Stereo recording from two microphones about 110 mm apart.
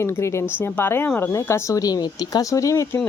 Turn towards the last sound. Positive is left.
turn(degrees=25)  # may be behind; listen again after turning